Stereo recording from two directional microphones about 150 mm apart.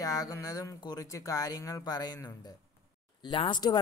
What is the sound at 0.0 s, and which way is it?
Speech, 25° left (ahead or behind).